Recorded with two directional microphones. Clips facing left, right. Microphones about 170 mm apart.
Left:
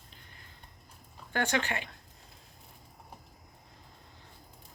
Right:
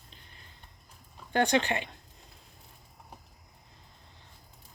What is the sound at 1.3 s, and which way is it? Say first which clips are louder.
Speech: right 5 dB; 20° right (ahead or behind).